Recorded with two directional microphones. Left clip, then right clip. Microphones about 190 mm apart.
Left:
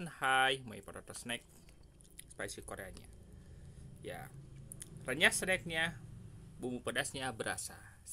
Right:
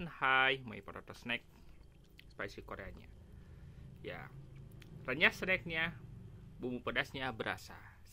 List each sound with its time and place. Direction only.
0.0 s speech: 10° left (ahead or behind)